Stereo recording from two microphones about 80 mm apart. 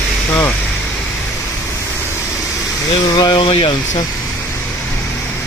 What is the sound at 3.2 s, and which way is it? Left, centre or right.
Speech, left.